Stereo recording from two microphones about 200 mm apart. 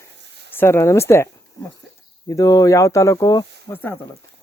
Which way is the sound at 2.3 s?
15° left (ahead or behind).